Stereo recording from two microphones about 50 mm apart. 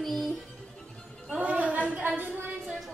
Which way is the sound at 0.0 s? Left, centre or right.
Centre.